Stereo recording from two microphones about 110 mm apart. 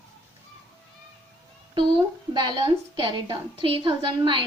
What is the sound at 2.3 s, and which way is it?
A woman's voice, 45° right (ahead or behind).